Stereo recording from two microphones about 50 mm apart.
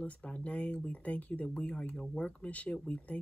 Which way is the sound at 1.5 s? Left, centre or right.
Centre.